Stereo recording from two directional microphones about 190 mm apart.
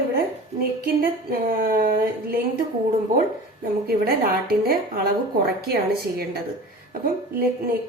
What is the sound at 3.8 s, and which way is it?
A woman's voice, 50° right (ahead or behind).